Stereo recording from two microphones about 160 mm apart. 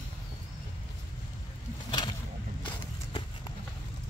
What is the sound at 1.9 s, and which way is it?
Vehicle, 25° left (ahead or behind).